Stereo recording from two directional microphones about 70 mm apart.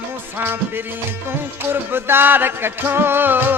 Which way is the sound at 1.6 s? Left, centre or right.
Right.